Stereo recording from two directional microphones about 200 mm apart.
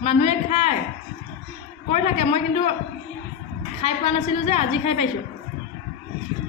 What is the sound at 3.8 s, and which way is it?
A woman's voice, 30° left (ahead or behind).